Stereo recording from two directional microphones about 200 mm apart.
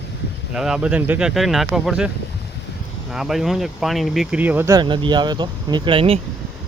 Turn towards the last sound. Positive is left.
turn(degrees=-30)  # may be behind; listen again after turning